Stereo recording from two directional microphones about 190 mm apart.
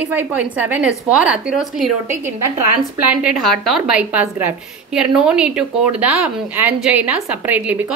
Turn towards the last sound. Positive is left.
turn(degrees=-10)  # may be behind; listen again after turning